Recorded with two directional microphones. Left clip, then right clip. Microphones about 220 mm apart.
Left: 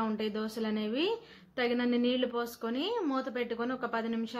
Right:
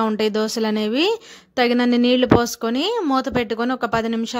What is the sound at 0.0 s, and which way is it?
A woman's voice, 45° right (ahead or behind).